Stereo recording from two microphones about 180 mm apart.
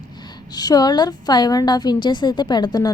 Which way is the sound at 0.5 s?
20° left (ahead or behind).